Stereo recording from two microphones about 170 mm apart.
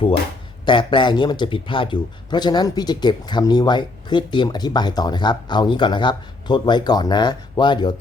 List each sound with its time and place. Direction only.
0.6 s a man's voice: 30° left (ahead or behind)